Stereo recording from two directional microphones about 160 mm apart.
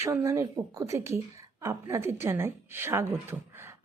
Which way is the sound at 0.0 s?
15° right (ahead or behind).